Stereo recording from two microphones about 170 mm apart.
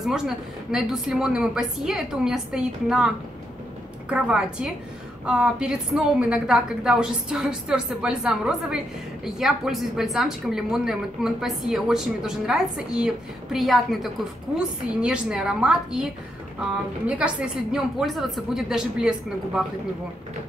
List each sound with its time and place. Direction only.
0.7 s a woman's voice: centre (ahead or behind)
4.1 s a woman's voice: 5° right (ahead or behind)
17.2 s a woman's voice: 5° right (ahead or behind)